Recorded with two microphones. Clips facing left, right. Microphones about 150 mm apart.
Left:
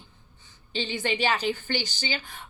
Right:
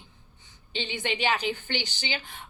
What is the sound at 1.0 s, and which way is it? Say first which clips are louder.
Speech: left 1 dB; 20° right (ahead or behind).